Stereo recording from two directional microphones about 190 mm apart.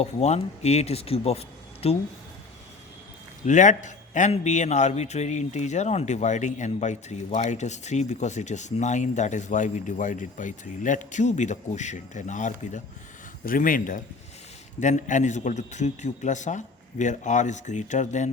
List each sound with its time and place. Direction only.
0.0 s a man's voice: 35° left (ahead or behind)
3.4 s a man's voice: 40° left (ahead or behind)